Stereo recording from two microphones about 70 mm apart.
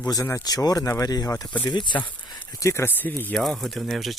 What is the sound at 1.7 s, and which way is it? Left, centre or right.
Speech, left.